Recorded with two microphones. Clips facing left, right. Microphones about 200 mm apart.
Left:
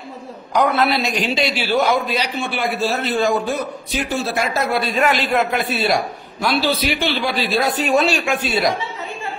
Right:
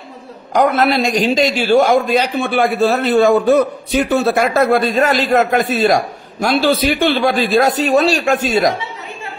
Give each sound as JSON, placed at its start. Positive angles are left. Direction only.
{"t": 0.5, "sound": "a man's voice", "side_deg": -45}